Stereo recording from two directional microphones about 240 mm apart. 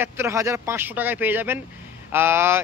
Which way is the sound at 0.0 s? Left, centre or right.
Centre.